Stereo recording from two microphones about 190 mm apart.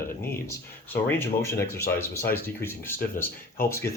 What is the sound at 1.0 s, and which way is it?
Speech, 15° left (ahead or behind).